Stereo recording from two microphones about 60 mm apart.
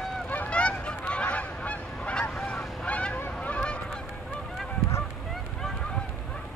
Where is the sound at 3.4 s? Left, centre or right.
Centre.